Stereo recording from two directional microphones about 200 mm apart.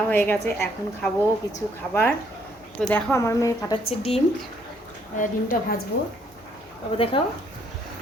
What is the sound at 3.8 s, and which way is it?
Speech, 30° left (ahead or behind).